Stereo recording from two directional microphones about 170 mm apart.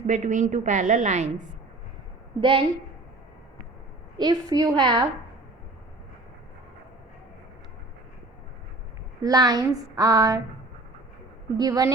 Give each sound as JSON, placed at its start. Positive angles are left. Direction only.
{"t": 0.1, "sound": "a woman's voice", "side_deg": -45}
{"t": 2.4, "sound": "a woman's voice", "side_deg": -30}
{"t": 4.2, "sound": "speech", "side_deg": -25}
{"t": 9.2, "sound": "speech", "side_deg": -20}
{"t": 11.5, "sound": "speech", "side_deg": -20}